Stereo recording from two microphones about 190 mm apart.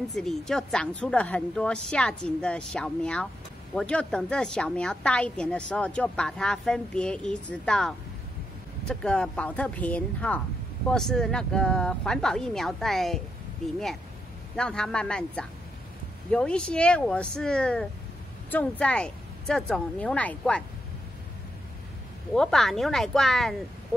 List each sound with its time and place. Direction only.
0.1 s a woman's voice: centre (ahead or behind)
14.6 s a woman's voice: 5° left (ahead or behind)
22.3 s a woman's voice: centre (ahead or behind)